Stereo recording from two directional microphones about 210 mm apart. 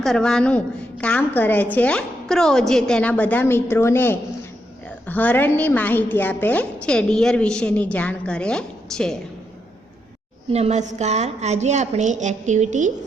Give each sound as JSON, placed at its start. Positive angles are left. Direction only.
{"t": 0.0, "sound": "a woman's voice", "side_deg": 0}
{"t": 10.5, "sound": "a woman's voice", "side_deg": -30}